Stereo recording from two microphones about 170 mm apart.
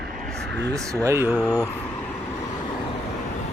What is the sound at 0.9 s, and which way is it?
Speech, 20° right (ahead or behind).